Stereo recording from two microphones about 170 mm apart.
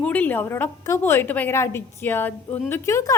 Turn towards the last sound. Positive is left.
turn(degrees=20)  # may be behind; listen again after turning